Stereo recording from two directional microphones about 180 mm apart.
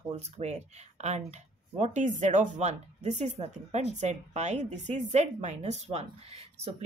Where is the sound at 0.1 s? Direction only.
35° right (ahead or behind).